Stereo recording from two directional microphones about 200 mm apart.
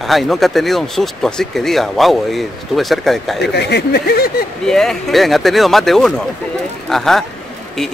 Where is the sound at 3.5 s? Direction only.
55° left (ahead or behind).